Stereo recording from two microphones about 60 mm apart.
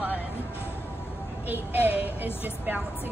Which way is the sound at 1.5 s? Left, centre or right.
Right.